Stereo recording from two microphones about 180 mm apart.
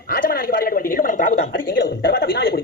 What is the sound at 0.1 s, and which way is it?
Speech, 55° left (ahead or behind).